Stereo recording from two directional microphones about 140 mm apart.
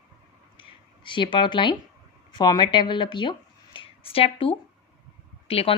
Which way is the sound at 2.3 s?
30° left (ahead or behind).